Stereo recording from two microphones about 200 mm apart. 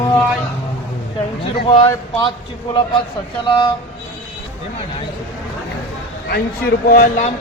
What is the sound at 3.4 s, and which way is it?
Speech, 25° left (ahead or behind).